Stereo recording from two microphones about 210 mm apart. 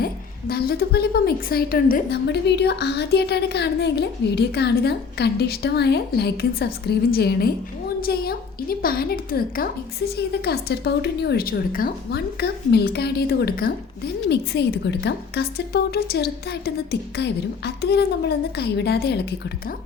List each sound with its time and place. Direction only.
0.0 s a woman's voice: 45° left (ahead or behind)